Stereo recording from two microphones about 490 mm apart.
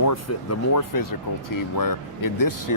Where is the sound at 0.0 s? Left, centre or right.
Left.